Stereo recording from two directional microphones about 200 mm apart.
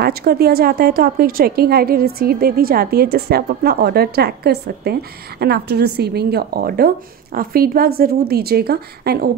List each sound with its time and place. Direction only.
0.0 s a woman's voice: 50° right (ahead or behind)